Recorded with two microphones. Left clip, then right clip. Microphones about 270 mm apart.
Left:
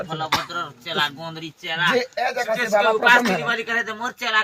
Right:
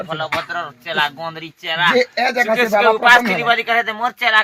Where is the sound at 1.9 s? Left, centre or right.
Right.